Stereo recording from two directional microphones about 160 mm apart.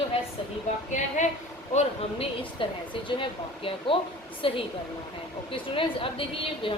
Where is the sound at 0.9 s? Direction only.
50° left (ahead or behind).